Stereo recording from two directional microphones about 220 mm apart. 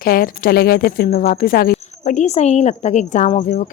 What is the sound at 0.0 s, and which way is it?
Speech, 40° left (ahead or behind).